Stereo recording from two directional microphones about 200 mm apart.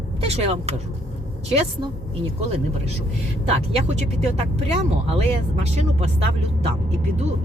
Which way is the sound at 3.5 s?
35° right (ahead or behind).